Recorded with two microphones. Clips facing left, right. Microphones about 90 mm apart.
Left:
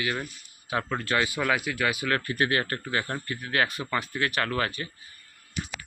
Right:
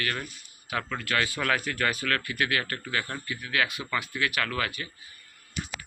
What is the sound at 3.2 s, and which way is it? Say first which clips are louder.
Speech: left 2 dB; 40° left (ahead or behind).